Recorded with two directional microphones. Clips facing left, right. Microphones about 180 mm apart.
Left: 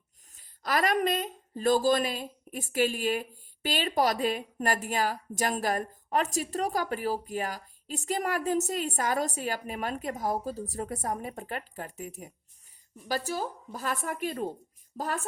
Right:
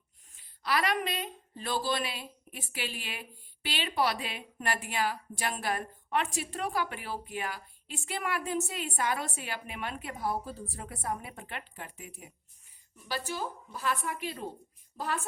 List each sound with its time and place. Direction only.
0.3 s a woman's voice: 45° left (ahead or behind)